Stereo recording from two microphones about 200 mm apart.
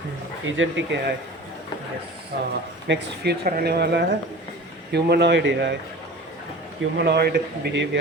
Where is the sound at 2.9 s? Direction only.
55° right (ahead or behind).